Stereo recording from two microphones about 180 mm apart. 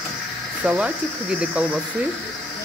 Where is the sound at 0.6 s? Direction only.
5° right (ahead or behind).